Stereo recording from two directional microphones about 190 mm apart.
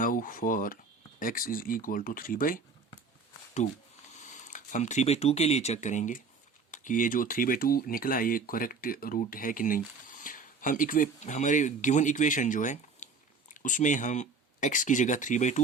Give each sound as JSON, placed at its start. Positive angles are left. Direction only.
{"t": 0.0, "sound": "speech", "side_deg": 45}
{"t": 4.1, "sound": "speech", "side_deg": 40}